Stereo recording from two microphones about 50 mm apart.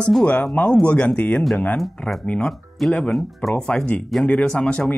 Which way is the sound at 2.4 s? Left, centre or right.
Centre.